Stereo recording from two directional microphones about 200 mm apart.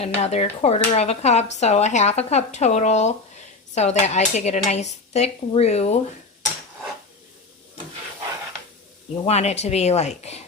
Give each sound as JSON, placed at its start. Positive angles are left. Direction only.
{"t": 0.0, "sound": "speech", "side_deg": 30}
{"t": 9.2, "sound": "speech", "side_deg": 35}